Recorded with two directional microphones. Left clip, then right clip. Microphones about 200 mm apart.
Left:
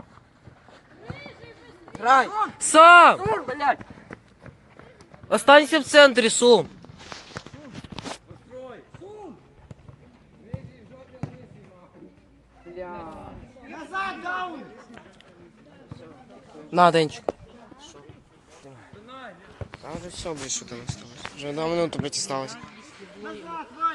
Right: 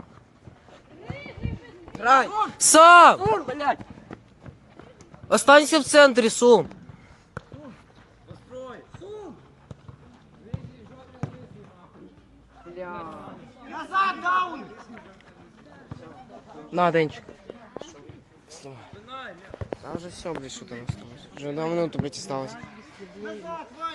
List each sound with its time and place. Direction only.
2.0 s speech: 35° left (ahead or behind)
2.7 s speech: 20° right (ahead or behind)
3.2 s speech: 45° right (ahead or behind)
4.1 s run: 30° left (ahead or behind)
5.3 s speech: 10° right (ahead or behind)
12.7 s a sound: 5° left (ahead or behind)
13.7 s a sound: 50° right (ahead or behind)
16.7 s speech: 30° left (ahead or behind)
17.0 s speech: 15° left (ahead or behind)
18.6 s a sound: 55° right (ahead or behind)
20.5 s speech: centre (ahead or behind)